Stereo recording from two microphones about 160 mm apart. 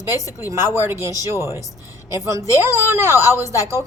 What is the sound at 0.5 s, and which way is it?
A woman's voice, 15° right (ahead or behind).